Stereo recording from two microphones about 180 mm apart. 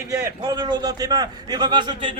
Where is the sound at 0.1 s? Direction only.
20° right (ahead or behind).